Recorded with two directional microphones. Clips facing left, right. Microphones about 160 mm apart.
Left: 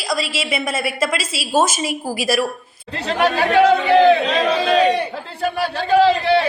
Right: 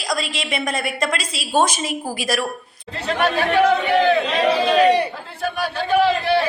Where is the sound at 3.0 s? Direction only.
30° left (ahead or behind).